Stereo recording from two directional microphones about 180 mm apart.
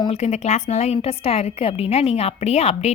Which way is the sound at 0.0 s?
35° left (ahead or behind).